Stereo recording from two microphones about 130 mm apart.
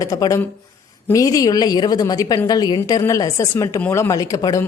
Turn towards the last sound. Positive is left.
turn(degrees=25)  # may be behind; listen again after turning